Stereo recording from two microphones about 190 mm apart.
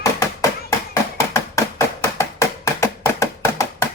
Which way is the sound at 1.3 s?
15° left (ahead or behind).